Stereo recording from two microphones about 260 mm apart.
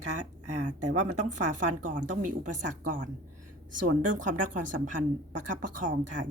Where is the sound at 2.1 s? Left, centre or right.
Right.